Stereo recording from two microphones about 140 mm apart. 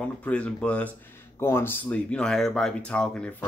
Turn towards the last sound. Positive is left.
turn(degrees=5)  # may be behind; listen again after turning